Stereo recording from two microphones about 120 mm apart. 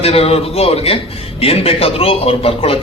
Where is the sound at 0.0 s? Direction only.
55° left (ahead or behind).